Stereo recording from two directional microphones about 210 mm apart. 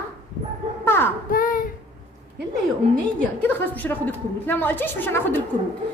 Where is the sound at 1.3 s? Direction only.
40° left (ahead or behind).